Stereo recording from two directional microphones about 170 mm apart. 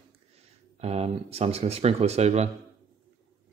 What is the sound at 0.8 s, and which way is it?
Speech, 35° right (ahead or behind).